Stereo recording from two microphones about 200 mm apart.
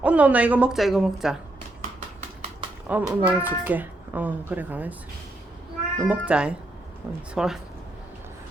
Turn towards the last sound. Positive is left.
turn(degrees=-5)  # may be behind; listen again after turning